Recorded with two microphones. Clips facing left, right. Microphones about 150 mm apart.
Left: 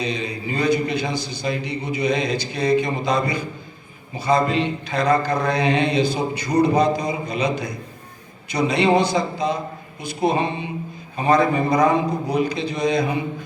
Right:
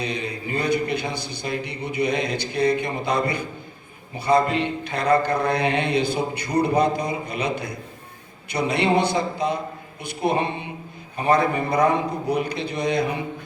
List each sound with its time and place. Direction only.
0.0 s mantra: 60° right (ahead or behind)